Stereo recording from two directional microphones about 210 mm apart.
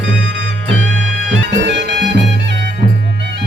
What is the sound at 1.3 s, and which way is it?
Music, 60° right (ahead or behind).